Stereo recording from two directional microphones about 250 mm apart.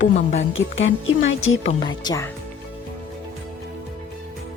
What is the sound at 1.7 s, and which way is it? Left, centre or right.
Speech, centre.